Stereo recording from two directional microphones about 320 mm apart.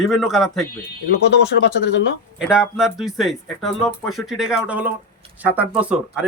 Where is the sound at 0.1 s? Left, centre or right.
Centre.